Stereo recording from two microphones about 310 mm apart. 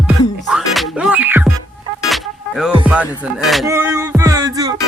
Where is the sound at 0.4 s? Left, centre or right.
Centre.